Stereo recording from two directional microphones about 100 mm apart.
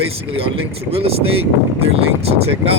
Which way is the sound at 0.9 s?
80° right.